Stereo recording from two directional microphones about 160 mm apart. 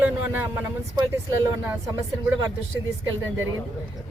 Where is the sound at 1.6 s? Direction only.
15° right (ahead or behind).